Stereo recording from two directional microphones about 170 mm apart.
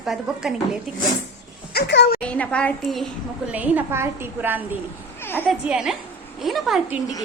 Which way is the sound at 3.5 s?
10° right (ahead or behind).